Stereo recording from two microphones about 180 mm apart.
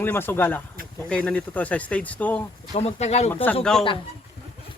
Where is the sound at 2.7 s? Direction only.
35° left (ahead or behind).